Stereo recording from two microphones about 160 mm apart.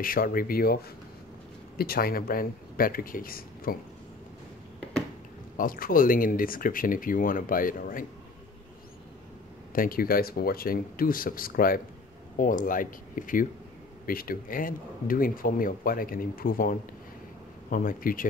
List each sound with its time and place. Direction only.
0.0 s speech: 65° left (ahead or behind)
1.8 s speech: 70° left (ahead or behind)
5.6 s speech: 60° left (ahead or behind)
9.7 s speech: 60° left (ahead or behind)